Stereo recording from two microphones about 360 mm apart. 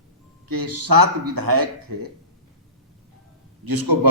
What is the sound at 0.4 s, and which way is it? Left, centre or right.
Speech, right.